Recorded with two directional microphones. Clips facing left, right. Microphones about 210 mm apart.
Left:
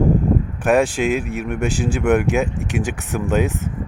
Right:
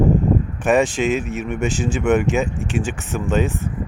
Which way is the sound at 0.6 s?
10° left (ahead or behind).